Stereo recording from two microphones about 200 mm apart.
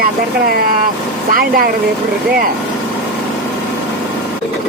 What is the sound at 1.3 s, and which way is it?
Speech, 45° right (ahead or behind).